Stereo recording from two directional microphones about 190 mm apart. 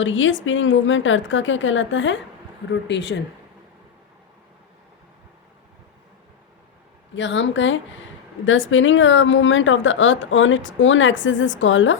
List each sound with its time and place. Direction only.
0.0 s a woman's voice: 90° left; by 3.2 s 65° left (ahead or behind)
7.2 s a woman's voice: 75° left (ahead or behind)